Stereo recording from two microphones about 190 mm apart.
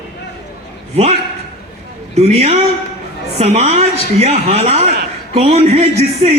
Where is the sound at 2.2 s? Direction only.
35° right (ahead or behind).